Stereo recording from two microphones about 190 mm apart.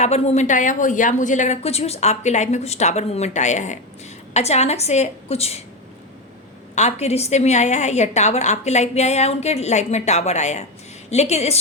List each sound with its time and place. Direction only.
0.0 s a woman's voice: 35° left (ahead or behind)
6.7 s a woman's voice: 35° left (ahead or behind)